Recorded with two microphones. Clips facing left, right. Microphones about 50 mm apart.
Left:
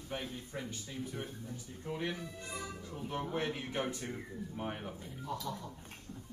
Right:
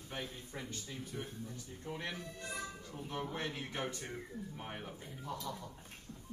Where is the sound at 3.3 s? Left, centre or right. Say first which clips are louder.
Left 4 dB; centre.